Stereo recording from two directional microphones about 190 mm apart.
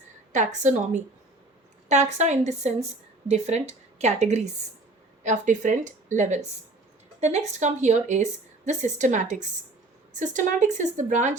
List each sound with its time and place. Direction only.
0.3 s a woman's voice: 40° right (ahead or behind)